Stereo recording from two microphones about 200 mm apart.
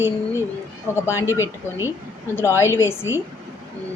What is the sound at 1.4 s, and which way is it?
Speech, 10° right (ahead or behind).